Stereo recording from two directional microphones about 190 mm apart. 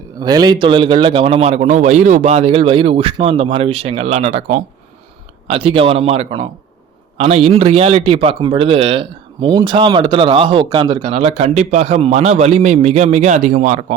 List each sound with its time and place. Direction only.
0.2 s a man's voice: 20° right (ahead or behind); by 13.8 s 40° right (ahead or behind)